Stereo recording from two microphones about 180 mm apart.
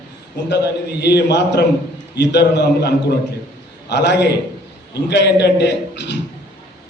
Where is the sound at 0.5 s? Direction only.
70° left (ahead or behind).